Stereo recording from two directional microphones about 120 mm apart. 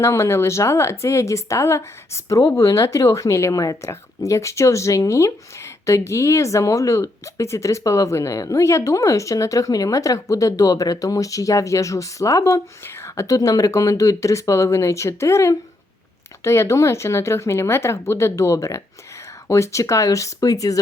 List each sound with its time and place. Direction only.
0.0 s speech: 25° left (ahead or behind)